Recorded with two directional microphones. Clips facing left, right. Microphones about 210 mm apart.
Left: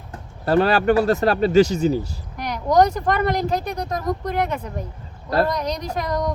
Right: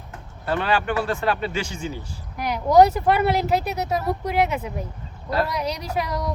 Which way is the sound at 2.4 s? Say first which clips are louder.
Right 2 dB; 10° right (ahead or behind).